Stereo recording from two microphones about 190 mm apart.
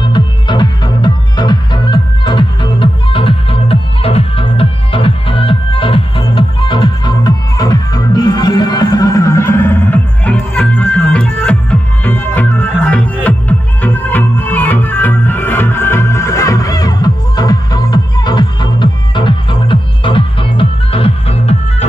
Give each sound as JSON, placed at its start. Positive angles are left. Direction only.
{"t": 0.1, "sound": "music", "side_deg": 25}